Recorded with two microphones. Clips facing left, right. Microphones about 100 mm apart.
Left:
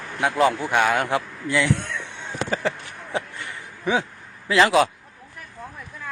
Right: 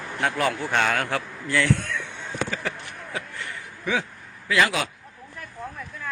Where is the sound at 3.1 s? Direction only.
20° left (ahead or behind).